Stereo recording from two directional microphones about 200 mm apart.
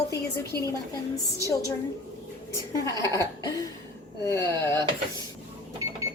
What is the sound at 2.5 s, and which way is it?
A woman's voice, 15° left (ahead or behind).